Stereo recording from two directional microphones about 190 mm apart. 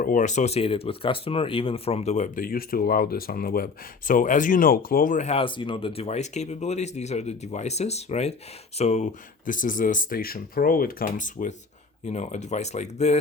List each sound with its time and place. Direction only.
0.0 s speech: 45° left (ahead or behind)